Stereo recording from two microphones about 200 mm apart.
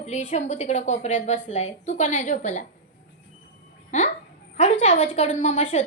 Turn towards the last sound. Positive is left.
turn(degrees=35)  # may be behind; listen again after turning